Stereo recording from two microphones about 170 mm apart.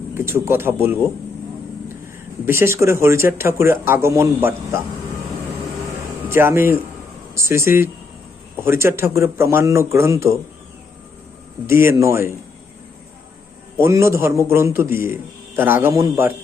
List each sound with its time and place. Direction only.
0.1 s a man's voice: 15° right (ahead or behind)
2.5 s a man's voice: 15° right (ahead or behind)
6.2 s a man's voice: 15° right (ahead or behind)
11.6 s a man's voice: 15° right (ahead or behind)
13.7 s a man's voice: 15° right (ahead or behind)